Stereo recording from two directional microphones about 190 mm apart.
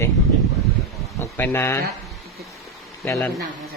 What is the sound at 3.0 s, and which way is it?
Speech, 15° left (ahead or behind).